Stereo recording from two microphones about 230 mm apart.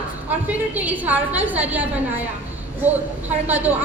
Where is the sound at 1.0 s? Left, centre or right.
Centre.